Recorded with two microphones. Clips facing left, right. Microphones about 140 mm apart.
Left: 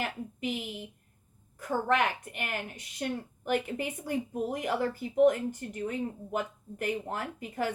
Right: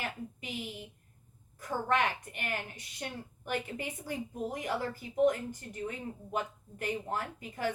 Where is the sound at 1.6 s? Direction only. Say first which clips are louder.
Left 3 dB; 55° left (ahead or behind).